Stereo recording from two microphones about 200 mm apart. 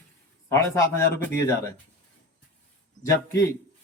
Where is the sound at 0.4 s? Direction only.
15° left (ahead or behind).